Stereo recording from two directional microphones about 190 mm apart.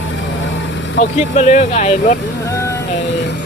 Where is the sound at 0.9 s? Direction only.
40° left (ahead or behind).